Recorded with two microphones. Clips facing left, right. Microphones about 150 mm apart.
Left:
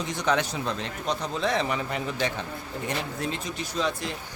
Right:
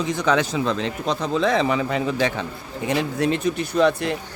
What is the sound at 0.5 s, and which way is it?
Speech, 90° right.